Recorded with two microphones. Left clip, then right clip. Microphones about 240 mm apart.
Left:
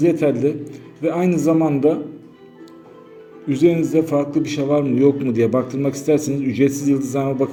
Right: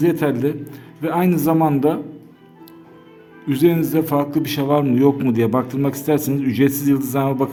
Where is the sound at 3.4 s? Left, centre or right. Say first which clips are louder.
Even; right.